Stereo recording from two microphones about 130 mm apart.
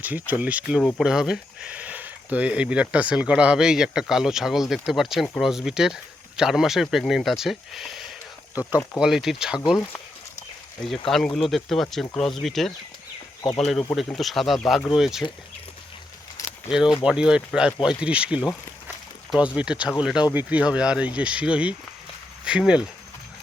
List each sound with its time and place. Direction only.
0.0 s speech: 15° right (ahead or behind)
11.0 s speech: 5° left (ahead or behind)
16.4 s keys jangling: 25° left (ahead or behind)
17.0 s speech: 5° right (ahead or behind)